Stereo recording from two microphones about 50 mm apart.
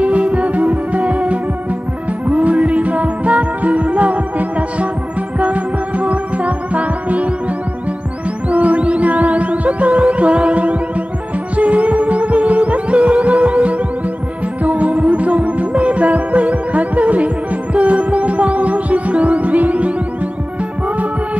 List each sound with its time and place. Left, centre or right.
0.0 s music: right
8.5 s throbbing: right
11.5 s music: right